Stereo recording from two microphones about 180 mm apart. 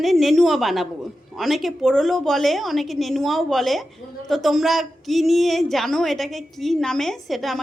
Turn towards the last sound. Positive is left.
turn(degrees=0)  # may be behind; listen again after turning